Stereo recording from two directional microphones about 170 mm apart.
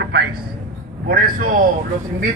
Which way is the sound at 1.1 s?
55° right (ahead or behind).